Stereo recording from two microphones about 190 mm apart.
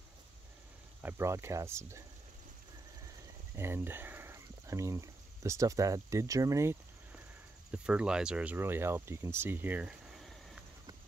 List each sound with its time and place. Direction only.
1.0 s speech: 15° right (ahead or behind)
3.5 s speech: 10° right (ahead or behind)